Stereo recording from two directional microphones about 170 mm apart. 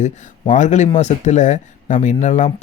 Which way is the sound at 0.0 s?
45° left (ahead or behind).